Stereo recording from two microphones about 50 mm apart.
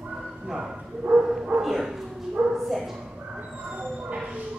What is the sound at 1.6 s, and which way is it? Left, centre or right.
Bow-wow, centre.